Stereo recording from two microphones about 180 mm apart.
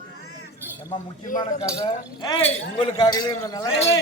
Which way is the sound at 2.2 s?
30° left (ahead or behind).